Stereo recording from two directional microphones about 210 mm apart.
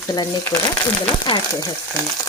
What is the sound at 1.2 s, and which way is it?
Speech, 20° left (ahead or behind).